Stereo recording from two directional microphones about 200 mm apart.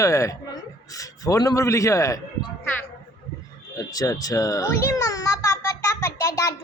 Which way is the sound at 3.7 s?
15° left (ahead or behind).